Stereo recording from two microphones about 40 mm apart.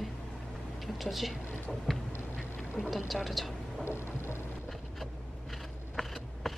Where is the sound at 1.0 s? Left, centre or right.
Centre.